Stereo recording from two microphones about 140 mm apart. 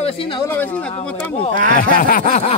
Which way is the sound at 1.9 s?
85° left.